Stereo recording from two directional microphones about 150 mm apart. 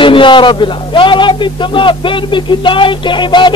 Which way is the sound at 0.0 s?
35° left (ahead or behind).